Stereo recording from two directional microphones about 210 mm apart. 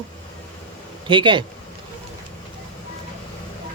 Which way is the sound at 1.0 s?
25° right (ahead or behind).